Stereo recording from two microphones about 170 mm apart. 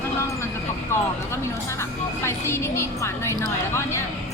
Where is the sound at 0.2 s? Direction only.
15° left (ahead or behind).